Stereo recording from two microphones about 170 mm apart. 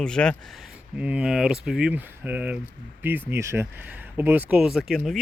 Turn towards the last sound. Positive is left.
turn(degrees=0)  # may be behind; listen again after turning